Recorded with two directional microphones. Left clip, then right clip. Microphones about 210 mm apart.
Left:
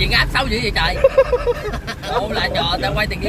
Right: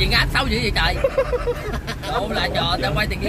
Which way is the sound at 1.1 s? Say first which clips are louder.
Left 6 dB; 50° left (ahead or behind).